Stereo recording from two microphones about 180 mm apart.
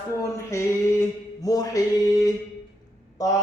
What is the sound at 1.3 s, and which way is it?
Music, 20° left (ahead or behind).